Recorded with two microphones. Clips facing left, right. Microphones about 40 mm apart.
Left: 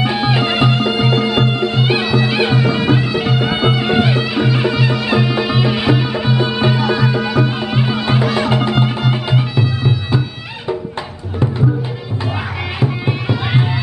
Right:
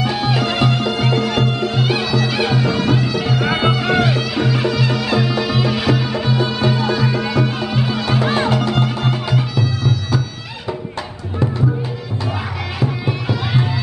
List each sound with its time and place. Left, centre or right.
0.0 s music: left
12.8 s music: left